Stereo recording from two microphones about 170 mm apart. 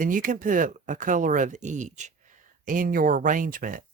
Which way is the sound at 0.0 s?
50° right (ahead or behind).